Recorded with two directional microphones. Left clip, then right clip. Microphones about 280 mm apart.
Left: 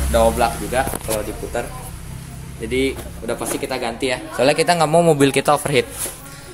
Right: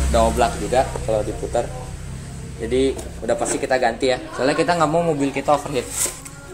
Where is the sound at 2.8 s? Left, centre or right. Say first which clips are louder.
Right 2 dB; centre.